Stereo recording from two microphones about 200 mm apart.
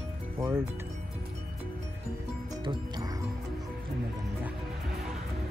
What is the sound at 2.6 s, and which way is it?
Music, 20° right (ahead or behind).